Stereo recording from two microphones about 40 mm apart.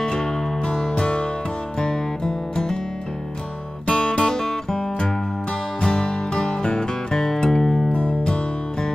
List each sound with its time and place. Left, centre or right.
0.0 s music: centre
3.8 s music: centre
5.8 s music: left
7.9 s music: left